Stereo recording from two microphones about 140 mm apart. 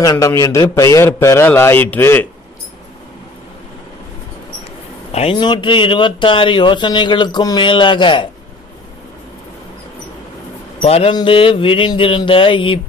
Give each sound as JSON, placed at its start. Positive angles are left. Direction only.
{"t": 0.0, "sound": "a man's voice", "side_deg": 25}
{"t": 5.1, "sound": "a man's voice", "side_deg": 45}
{"t": 5.4, "sound": "speech", "side_deg": 35}
{"t": 10.8, "sound": "speech", "side_deg": 45}